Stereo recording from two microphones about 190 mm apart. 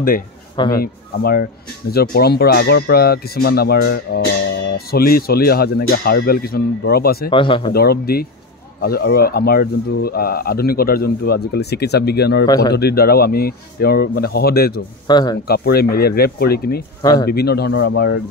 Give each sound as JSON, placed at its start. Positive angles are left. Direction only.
{"t": 0.7, "sound": "speech", "side_deg": 55}
{"t": 7.2, "sound": "a man's voice", "side_deg": 25}
{"t": 7.7, "sound": "speech", "side_deg": 55}
{"t": 12.4, "sound": "a man's voice", "side_deg": 20}
{"t": 12.7, "sound": "speech", "side_deg": 55}
{"t": 15.0, "sound": "a man's voice", "side_deg": 20}
{"t": 15.4, "sound": "speech", "side_deg": 55}
{"t": 17.0, "sound": "a man's voice", "side_deg": 20}
{"t": 17.3, "sound": "speech", "side_deg": 55}